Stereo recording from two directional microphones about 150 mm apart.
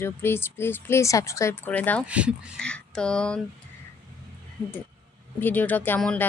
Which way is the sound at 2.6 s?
5° left (ahead or behind).